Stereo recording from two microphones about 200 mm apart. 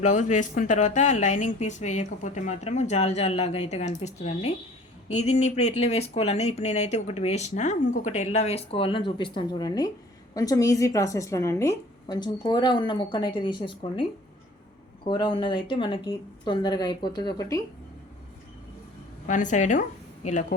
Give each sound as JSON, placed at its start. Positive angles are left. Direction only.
{"t": 0.0, "sound": "a woman's voice", "side_deg": 40}
{"t": 19.3, "sound": "speech", "side_deg": 40}